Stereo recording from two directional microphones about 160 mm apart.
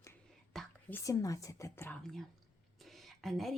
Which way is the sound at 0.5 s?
Centre (ahead or behind).